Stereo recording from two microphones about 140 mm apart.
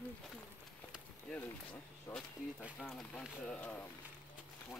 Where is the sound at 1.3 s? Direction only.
10° left (ahead or behind).